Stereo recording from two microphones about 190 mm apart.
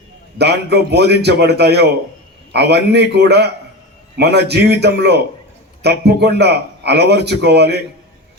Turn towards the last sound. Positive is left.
turn(degrees=-60)  # may be behind; listen again after turning